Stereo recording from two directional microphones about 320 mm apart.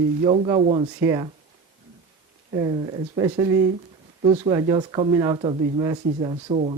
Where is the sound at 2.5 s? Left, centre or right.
Centre.